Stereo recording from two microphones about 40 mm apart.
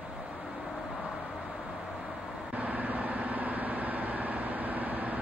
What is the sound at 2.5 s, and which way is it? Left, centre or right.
Vehicle, right.